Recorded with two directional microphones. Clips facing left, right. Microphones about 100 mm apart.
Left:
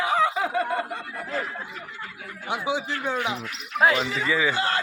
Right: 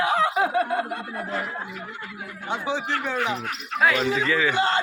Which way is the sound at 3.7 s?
30° left (ahead or behind).